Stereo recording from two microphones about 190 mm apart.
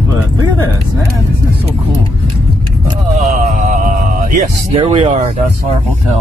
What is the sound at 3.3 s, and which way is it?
Speech, 40° right (ahead or behind).